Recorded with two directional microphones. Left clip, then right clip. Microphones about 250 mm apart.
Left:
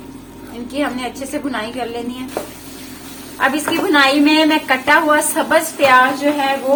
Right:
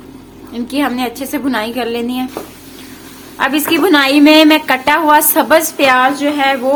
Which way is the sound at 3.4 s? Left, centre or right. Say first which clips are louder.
Right 4 dB; right.